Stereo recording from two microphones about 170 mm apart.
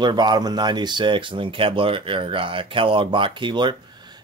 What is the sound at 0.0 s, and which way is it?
Speech, 25° right (ahead or behind).